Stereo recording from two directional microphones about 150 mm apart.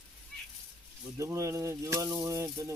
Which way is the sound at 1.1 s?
20° right (ahead or behind).